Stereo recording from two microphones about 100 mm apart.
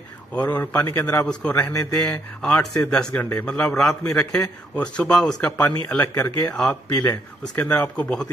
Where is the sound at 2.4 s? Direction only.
5° left (ahead or behind).